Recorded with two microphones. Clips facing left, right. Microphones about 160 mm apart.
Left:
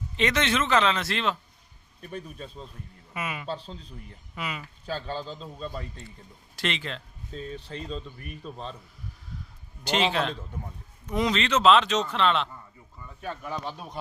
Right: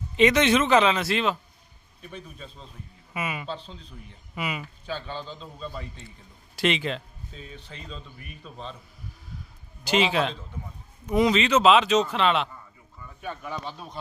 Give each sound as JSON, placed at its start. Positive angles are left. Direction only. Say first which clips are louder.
{"t": 0.2, "sound": "speech", "louder": "right 6 dB", "side_deg": -15}
{"t": 2.0, "sound": "speech", "louder": "left 3 dB", "side_deg": 45}
{"t": 3.1, "sound": "speech", "louder": "right 1 dB", "side_deg": -5}
{"t": 4.9, "sound": "speech", "louder": "left 2 dB", "side_deg": 35}
{"t": 5.2, "sound": "speech", "louder": "left 1 dB", "side_deg": 0}
{"t": 6.6, "sound": "speech", "louder": "right 6 dB", "side_deg": -15}
{"t": 7.3, "sound": "speech", "louder": "left 8 dB", "side_deg": 40}
{"t": 9.8, "sound": "speech", "louder": "right 2 dB", "side_deg": -5}
{"t": 13.5, "sound": "speech", "louder": "left 1 dB", "side_deg": 10}